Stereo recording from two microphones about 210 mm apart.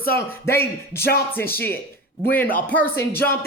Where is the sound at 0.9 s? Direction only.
50° left (ahead or behind).